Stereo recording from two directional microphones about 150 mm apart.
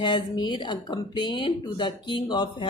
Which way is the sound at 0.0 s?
30° left (ahead or behind).